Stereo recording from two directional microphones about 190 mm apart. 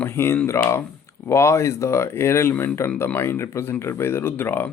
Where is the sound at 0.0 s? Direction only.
10° left (ahead or behind).